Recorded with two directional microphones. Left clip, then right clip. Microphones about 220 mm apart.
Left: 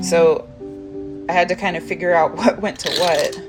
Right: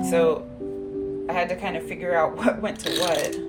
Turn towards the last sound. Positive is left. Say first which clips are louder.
# left 6 dB
turn(degrees=25)  # may be behind; listen again after turning